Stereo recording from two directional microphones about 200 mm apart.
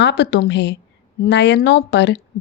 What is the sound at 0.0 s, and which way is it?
Speech, 60° left (ahead or behind).